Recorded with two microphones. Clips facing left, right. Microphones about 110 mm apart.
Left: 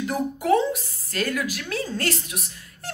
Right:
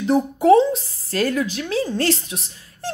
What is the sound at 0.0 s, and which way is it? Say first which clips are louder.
Speech: right 8 dB; 30° right (ahead or behind).